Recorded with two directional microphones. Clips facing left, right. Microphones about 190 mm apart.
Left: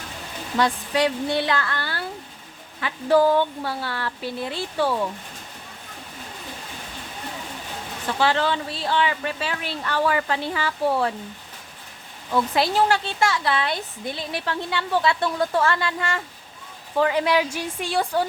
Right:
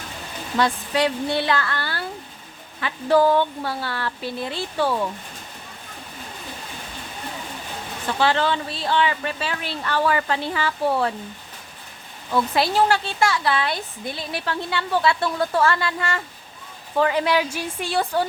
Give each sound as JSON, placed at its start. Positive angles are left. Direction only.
{"t": 0.5, "sound": "speech", "side_deg": 15}
{"t": 8.0, "sound": "speech", "side_deg": 10}
{"t": 12.3, "sound": "a woman's voice", "side_deg": 20}